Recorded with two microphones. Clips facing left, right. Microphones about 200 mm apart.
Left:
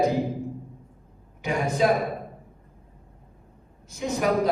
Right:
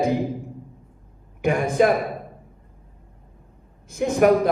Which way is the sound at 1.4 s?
55° right (ahead or behind).